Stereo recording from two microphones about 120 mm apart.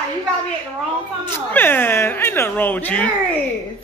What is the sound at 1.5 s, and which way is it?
Speech, 15° left (ahead or behind).